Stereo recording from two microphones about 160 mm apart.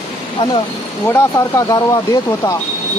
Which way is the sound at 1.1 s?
20° left (ahead or behind).